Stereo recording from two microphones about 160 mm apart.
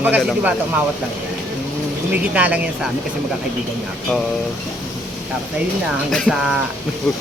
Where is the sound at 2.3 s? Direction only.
10° right (ahead or behind).